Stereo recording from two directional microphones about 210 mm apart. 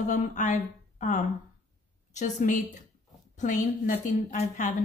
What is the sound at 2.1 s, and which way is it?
Speech, 35° left (ahead or behind).